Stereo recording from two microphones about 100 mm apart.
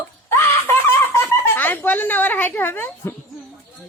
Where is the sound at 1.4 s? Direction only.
20° left (ahead or behind).